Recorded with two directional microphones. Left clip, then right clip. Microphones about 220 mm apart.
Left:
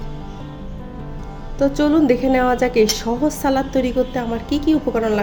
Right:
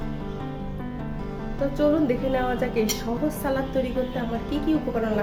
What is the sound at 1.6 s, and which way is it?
A woman's voice, 40° left (ahead or behind).